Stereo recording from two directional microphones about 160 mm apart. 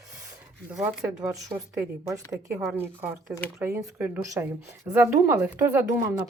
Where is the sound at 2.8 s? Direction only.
15° right (ahead or behind).